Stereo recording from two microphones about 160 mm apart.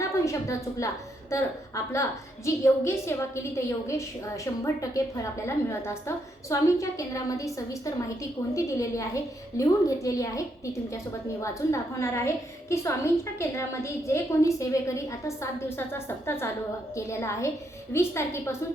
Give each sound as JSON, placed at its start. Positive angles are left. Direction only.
{"t": 0.0, "sound": "a woman's voice", "side_deg": 20}